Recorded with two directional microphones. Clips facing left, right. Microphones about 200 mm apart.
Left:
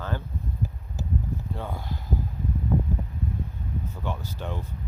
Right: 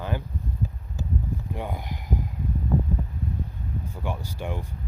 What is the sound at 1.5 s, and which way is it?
Speech, 15° right (ahead or behind).